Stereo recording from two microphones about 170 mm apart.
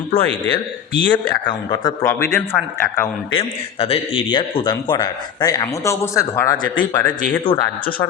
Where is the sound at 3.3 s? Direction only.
30° left (ahead or behind); by 7.4 s 10° left (ahead or behind).